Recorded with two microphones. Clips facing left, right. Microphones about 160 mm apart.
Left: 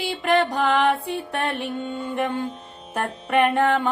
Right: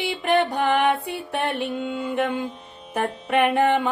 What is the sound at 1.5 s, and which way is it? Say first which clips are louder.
Mantra: right 2 dB; 90° right.